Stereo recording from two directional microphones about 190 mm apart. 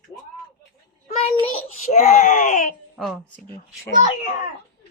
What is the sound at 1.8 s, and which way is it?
Speech, 35° left (ahead or behind).